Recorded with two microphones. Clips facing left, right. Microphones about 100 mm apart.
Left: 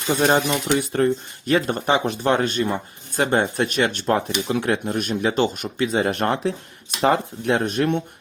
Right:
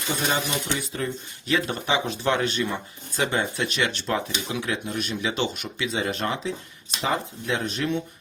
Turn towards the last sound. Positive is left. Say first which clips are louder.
# left 6 dB
turn(degrees=55)  # may be behind; listen again after turning